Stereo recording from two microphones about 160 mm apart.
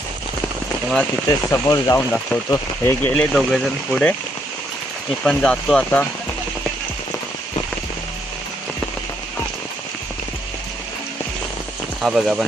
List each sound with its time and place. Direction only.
1.5 s speech: 20° left (ahead or behind); by 4.1 s 5° left (ahead or behind)
5.2 s speech: 5° left (ahead or behind)
12.0 s speech: centre (ahead or behind)